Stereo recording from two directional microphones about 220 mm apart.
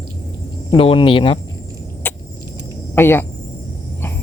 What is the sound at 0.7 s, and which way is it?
Speech, 25° left (ahead or behind).